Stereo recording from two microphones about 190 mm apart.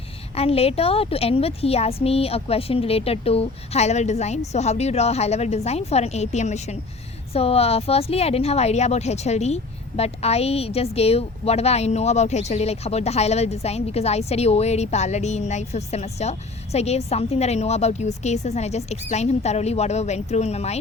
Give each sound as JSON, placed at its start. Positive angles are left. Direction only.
{"t": 0.3, "sound": "a woman's voice", "side_deg": 30}